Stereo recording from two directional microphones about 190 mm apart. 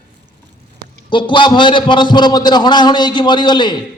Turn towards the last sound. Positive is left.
turn(degrees=25)  # may be behind; listen again after turning